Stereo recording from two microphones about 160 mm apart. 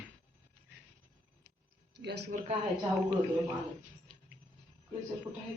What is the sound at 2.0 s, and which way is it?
Speech, 90° right.